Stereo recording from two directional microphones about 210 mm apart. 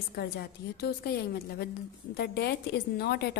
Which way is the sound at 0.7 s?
50° left (ahead or behind).